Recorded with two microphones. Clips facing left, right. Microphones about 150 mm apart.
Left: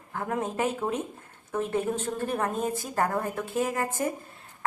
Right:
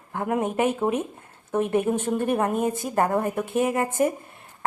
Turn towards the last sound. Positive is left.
turn(degrees=-20)  # may be behind; listen again after turning